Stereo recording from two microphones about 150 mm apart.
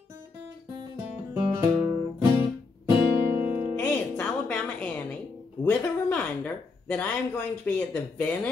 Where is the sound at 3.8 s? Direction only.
10° left (ahead or behind).